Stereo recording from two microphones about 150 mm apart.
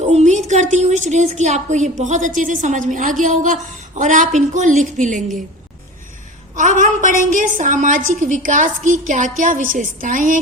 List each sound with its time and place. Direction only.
0.0 s a woman's voice: 45° right (ahead or behind)
6.6 s a woman's voice: 55° right (ahead or behind)